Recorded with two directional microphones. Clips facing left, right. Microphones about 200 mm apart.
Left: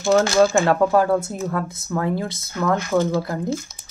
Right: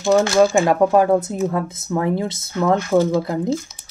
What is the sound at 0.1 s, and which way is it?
Speech, 15° right (ahead or behind).